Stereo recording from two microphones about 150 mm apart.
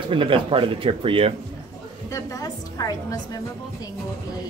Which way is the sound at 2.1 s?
25° left (ahead or behind).